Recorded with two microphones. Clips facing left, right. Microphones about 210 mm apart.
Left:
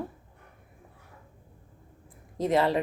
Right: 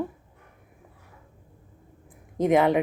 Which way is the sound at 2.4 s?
15° right (ahead or behind).